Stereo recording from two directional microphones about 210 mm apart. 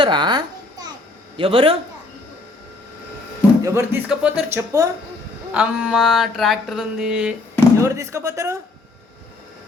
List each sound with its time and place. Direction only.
0.0 s babbling: 20° right (ahead or behind)
1.4 s a man's voice: 25° right (ahead or behind)
3.6 s speech: 15° right (ahead or behind)
4.1 s a sound: 5° right (ahead or behind)
4.5 s speech: 15° right (ahead or behind)
5.5 s a sound: 5° right (ahead or behind)
7.8 s speech: 15° right (ahead or behind)